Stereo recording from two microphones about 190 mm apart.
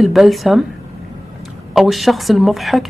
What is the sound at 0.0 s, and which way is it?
Speech, centre (ahead or behind).